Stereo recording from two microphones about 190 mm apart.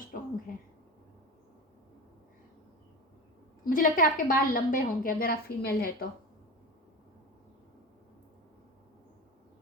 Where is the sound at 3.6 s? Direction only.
45° left (ahead or behind).